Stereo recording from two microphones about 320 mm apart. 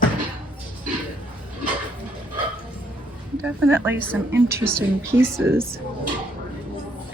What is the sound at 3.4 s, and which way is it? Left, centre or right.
Speech, centre.